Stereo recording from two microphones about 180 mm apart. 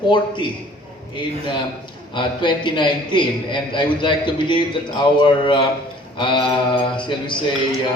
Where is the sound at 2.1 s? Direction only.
25° left (ahead or behind).